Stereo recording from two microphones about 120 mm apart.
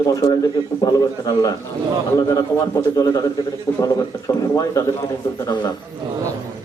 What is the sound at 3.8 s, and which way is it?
A man's voice, 30° left (ahead or behind).